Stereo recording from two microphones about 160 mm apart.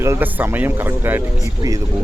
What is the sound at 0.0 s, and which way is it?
Speech, 15° right (ahead or behind).